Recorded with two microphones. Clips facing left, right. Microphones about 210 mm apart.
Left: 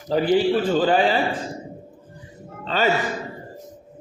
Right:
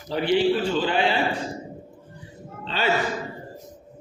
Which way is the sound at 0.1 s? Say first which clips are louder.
Left 3 dB; 45° left (ahead or behind).